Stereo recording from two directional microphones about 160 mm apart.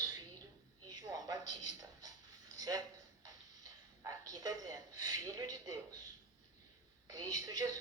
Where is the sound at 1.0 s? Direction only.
25° right (ahead or behind).